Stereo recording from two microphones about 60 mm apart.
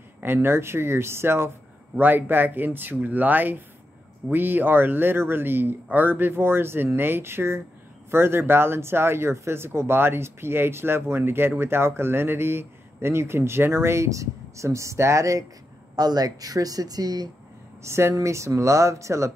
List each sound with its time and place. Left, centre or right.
0.2 s speech: right
2.0 s speech: right
16.0 s speech: right
17.8 s speech: right